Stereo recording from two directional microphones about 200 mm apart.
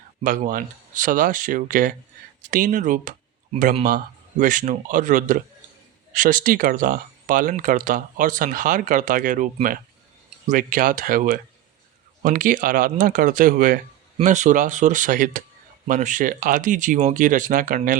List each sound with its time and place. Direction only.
0.2 s speech: 40° right (ahead or behind)